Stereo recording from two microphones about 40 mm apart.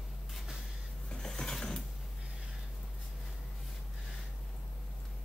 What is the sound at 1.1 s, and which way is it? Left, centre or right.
Pulleys, centre.